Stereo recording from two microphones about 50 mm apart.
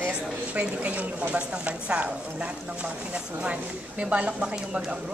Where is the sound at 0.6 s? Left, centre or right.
Right.